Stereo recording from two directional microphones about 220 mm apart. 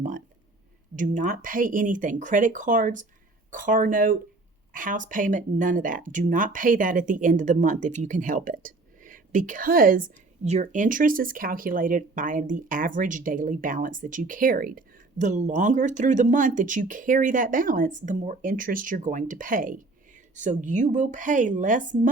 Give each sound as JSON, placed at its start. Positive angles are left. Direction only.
{"t": 0.9, "sound": "speech", "side_deg": -35}